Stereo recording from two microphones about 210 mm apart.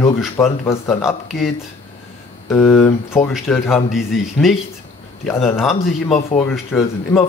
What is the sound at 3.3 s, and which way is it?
Speech, centre (ahead or behind).